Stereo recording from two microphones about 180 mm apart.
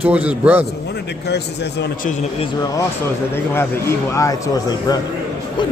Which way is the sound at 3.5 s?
15° left (ahead or behind).